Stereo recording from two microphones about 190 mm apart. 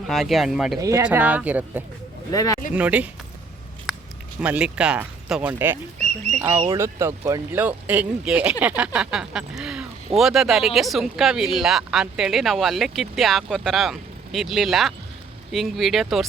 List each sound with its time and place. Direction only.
0.1 s a woman's voice: centre (ahead or behind)
0.8 s speech: 15° right (ahead or behind)
2.3 s speech: 20° left (ahead or behind)
2.7 s speech: 5° right (ahead or behind)
4.4 s a woman's voice: 5° right (ahead or behind)